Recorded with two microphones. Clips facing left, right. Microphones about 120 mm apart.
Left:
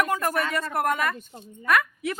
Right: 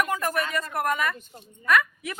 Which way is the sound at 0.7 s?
30° left (ahead or behind).